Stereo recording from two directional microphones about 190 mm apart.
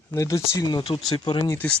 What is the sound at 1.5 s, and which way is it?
Speech, 5° left (ahead or behind).